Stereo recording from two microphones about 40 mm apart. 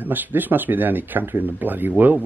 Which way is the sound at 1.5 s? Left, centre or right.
Right.